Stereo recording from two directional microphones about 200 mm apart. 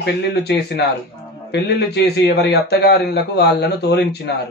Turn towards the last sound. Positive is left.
turn(degrees=55)  # may be behind; listen again after turning